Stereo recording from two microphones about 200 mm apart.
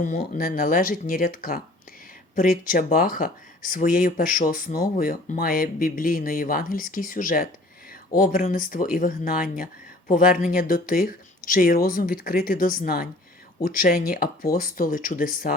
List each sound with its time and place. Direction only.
0.0 s speech: 45° left (ahead or behind)